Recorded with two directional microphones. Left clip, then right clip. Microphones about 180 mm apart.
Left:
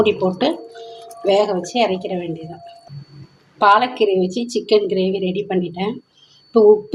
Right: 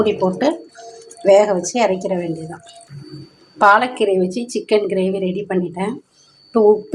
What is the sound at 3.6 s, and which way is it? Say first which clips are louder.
A woman's voice: right 1 dB; 10° right (ahead or behind).